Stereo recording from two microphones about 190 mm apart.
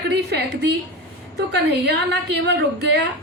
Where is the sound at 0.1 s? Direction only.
60° right (ahead or behind).